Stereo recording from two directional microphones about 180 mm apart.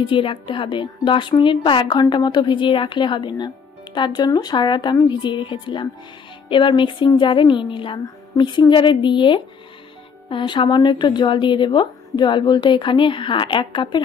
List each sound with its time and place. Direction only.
0.0 s a woman's voice: 30° left (ahead or behind)